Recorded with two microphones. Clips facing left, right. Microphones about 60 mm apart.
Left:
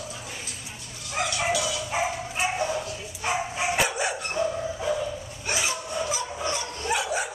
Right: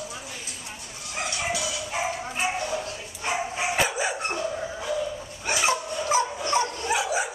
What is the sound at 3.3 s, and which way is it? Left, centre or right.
Dog, centre.